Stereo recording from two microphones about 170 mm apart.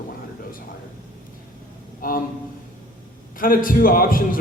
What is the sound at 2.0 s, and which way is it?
Speech, 55° left (ahead or behind).